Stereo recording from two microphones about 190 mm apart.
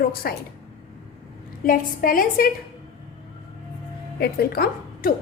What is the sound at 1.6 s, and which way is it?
Speech, 50° left (ahead or behind).